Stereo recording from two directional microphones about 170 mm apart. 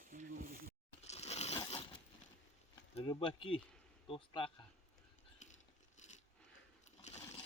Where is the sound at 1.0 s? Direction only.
40° left (ahead or behind).